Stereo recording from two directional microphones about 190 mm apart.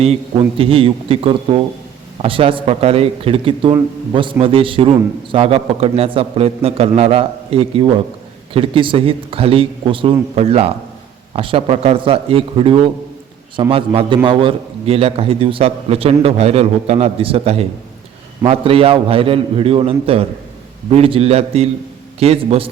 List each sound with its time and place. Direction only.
0.0 s a man's voice: 30° right (ahead or behind)